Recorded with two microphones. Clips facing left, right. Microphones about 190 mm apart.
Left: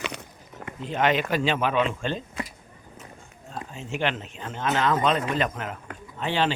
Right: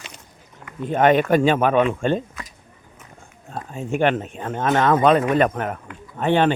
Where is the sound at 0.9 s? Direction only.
50° right (ahead or behind).